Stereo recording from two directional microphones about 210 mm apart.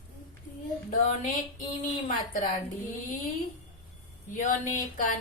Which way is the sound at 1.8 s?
40° left (ahead or behind).